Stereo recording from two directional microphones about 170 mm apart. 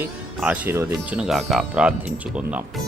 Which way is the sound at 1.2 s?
Centre (ahead or behind).